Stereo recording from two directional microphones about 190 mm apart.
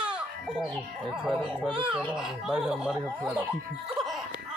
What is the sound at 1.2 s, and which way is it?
Speech, 5° right (ahead or behind).